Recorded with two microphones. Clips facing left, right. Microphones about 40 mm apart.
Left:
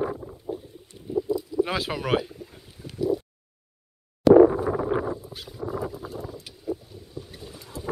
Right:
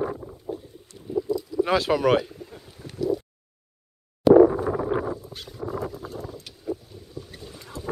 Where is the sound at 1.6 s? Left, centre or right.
Centre.